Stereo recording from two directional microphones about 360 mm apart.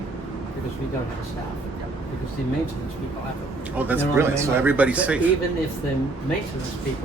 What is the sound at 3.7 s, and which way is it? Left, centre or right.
Speech, centre.